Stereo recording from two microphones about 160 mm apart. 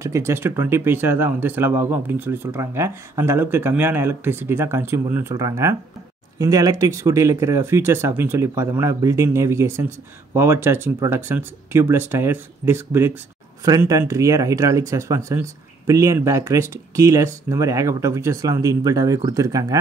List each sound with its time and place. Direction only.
0.0 s speech: 20° right (ahead or behind)